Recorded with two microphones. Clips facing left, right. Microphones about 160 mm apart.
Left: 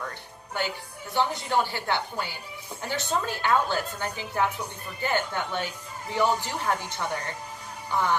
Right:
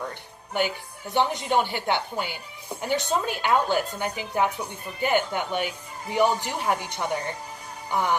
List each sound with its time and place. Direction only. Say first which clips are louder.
1.1 s speech: right 2 dB; 20° right (ahead or behind)